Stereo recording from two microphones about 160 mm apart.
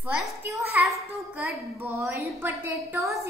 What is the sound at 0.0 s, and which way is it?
A child's voice, 5° right (ahead or behind).